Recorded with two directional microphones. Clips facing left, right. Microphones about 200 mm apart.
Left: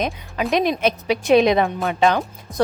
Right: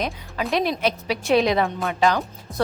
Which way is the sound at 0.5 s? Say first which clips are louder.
Left 3 dB; 20° left (ahead or behind).